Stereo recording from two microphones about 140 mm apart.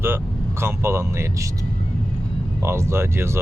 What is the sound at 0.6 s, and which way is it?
Speech, 15° right (ahead or behind).